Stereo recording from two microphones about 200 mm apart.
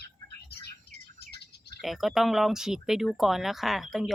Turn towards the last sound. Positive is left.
turn(degrees=0)  # may be behind; listen again after turning